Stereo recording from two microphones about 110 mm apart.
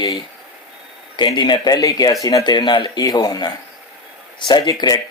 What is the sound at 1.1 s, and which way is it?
Speech, 45° left (ahead or behind).